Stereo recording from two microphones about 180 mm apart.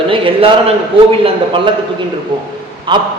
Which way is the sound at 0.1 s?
30° right (ahead or behind).